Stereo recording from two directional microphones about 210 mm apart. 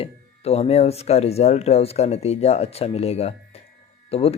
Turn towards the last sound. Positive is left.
turn(degrees=30)  # may be behind; listen again after turning